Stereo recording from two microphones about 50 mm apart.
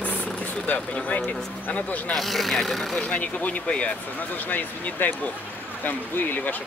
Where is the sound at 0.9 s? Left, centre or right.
Left.